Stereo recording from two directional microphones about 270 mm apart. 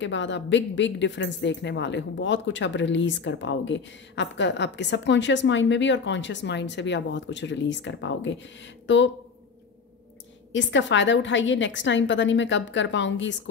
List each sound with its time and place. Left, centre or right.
0.0 s a woman's voice: left
10.5 s a woman's voice: left